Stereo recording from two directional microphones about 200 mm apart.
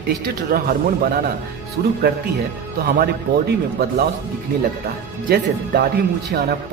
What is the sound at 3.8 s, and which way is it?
Speech, 50° right (ahead or behind).